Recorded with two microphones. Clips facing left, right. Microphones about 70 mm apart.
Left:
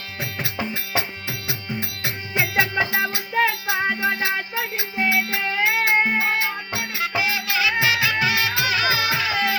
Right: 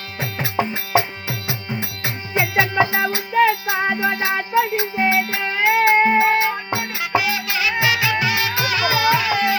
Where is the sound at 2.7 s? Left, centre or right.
Centre.